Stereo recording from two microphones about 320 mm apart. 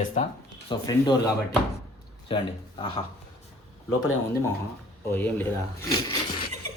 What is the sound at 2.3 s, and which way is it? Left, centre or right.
Speech, centre.